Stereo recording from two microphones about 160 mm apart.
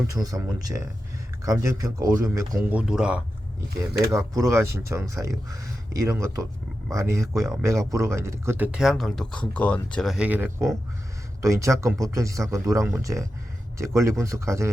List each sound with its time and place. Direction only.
0.1 s speech: 20° right (ahead or behind)
2.6 s speech: 5° right (ahead or behind)
4.0 s speech: 20° right (ahead or behind)